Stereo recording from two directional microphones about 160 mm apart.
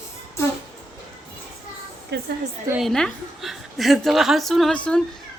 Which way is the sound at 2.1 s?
90° right.